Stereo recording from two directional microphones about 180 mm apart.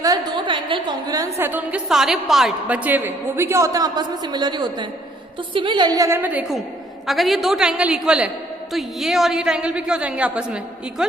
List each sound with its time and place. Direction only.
0.0 s a woman's voice: 20° right (ahead or behind); by 11.0 s 5° right (ahead or behind)